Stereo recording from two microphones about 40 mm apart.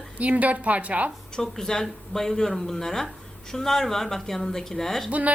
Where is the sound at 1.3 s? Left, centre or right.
Centre.